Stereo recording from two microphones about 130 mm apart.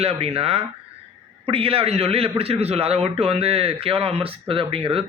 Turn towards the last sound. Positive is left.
turn(degrees=-45)  # may be behind; listen again after turning